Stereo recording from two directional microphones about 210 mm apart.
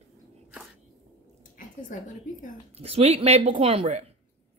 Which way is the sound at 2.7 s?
30° right (ahead or behind).